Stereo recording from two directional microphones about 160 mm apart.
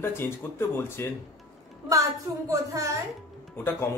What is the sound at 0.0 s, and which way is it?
Speech, 15° left (ahead or behind).